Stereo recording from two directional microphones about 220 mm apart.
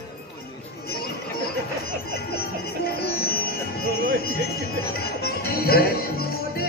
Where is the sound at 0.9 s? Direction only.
45° left (ahead or behind).